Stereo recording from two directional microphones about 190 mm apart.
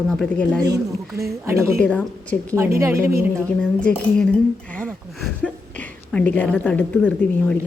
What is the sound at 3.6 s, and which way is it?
Speech, 5° left (ahead or behind).